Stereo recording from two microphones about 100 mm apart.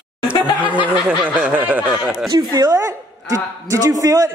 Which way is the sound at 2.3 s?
40° right (ahead or behind).